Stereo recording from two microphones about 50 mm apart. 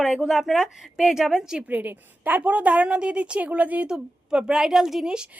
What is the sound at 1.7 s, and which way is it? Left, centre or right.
Speech, right.